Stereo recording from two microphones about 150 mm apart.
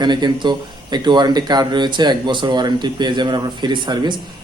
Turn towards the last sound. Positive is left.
turn(degrees=-30)  # may be behind; listen again after turning